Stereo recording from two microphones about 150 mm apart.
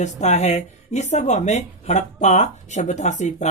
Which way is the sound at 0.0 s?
50° left (ahead or behind).